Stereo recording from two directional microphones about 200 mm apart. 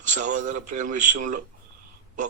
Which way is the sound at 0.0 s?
40° right (ahead or behind).